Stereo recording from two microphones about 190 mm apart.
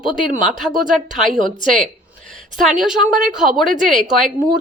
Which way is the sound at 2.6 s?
Centre (ahead or behind).